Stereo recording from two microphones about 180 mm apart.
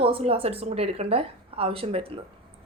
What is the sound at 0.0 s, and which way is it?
Speech, 30° right (ahead or behind).